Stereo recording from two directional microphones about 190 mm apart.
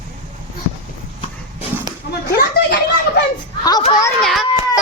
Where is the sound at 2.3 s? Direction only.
55° left (ahead or behind).